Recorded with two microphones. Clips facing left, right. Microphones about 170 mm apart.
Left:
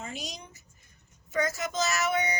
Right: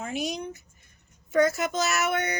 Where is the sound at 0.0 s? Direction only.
55° right (ahead or behind).